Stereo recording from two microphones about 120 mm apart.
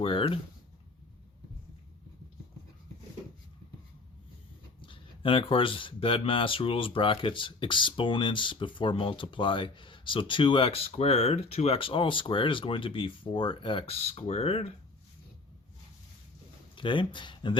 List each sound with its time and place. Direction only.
0.0 s speech: 50° left (ahead or behind)
4.8 s speech: 45° left (ahead or behind)
16.7 s speech: 45° left (ahead or behind)